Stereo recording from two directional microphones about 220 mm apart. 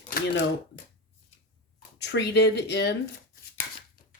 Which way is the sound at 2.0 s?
50° left (ahead or behind).